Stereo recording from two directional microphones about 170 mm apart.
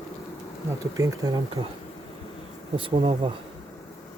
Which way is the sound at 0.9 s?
20° right (ahead or behind).